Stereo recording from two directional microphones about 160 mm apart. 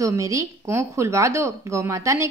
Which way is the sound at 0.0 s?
20° right (ahead or behind).